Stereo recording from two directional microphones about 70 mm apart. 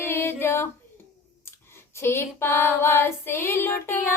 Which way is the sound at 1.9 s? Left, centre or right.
Left.